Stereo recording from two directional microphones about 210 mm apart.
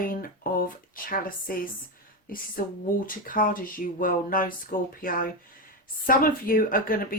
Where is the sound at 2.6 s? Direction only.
45° left (ahead or behind).